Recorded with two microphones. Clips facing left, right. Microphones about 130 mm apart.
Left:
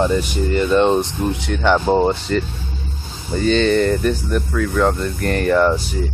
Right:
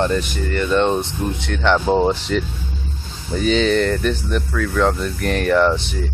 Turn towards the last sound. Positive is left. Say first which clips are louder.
# left 1 dB
turn(degrees=5)  # may be behind; listen again after turning